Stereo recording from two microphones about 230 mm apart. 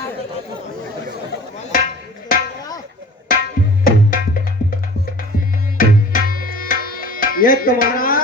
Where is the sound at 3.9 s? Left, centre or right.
Left.